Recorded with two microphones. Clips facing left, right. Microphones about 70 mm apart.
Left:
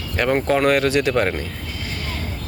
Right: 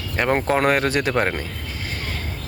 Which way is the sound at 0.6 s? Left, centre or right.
Right.